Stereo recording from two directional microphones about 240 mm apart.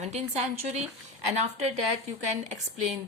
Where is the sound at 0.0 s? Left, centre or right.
Right.